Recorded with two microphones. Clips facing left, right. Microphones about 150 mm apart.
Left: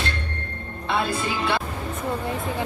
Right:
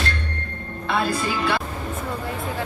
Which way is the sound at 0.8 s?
25° left (ahead or behind).